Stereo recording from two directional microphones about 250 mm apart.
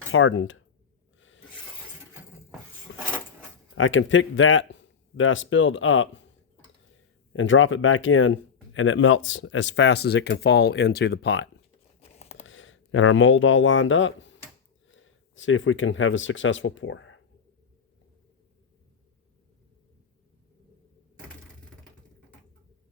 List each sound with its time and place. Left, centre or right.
0.1 s speech: left
2.9 s a sound: left
3.8 s speech: left
7.3 s speech: left
11.9 s a sound: left
12.5 s speech: left